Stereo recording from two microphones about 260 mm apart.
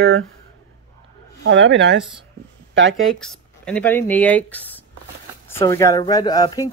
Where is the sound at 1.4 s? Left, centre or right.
Right.